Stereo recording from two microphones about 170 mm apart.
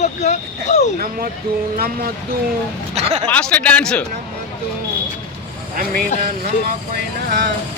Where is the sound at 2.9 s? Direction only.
40° right (ahead or behind).